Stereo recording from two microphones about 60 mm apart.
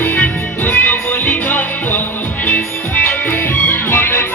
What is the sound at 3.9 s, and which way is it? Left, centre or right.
Music, left.